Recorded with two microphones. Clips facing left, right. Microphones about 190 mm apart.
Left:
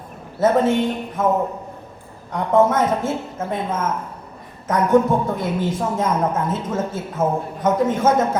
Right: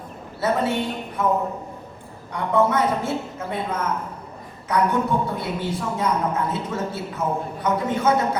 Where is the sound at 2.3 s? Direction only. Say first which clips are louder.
Left 4 dB; 45° left (ahead or behind).